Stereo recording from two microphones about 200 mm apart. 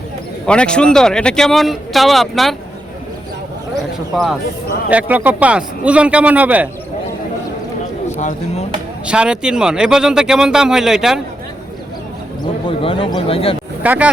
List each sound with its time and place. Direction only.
0.4 s speech: 5° left (ahead or behind)
4.9 s speech: 5° right (ahead or behind)
8.1 s speech: 35° left (ahead or behind)
9.0 s speech: 5° right (ahead or behind)
12.6 s speech: 25° left (ahead or behind)
13.8 s speech: 10° right (ahead or behind)